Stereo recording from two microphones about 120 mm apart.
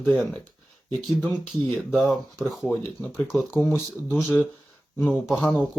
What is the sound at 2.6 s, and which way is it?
Speech, 20° left (ahead or behind).